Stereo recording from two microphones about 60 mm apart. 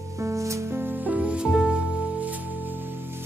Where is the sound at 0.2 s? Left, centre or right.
Right.